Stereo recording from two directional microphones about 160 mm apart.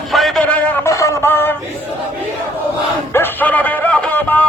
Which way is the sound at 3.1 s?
10° left (ahead or behind).